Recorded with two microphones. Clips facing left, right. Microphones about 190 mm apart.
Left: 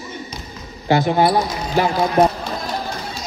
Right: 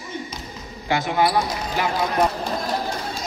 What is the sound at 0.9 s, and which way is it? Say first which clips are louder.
Speech: left 5 dB; 35° left (ahead or behind).